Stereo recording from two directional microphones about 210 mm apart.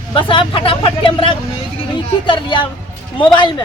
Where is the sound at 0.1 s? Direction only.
25° left (ahead or behind).